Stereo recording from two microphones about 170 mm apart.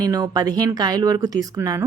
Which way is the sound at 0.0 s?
20° right (ahead or behind).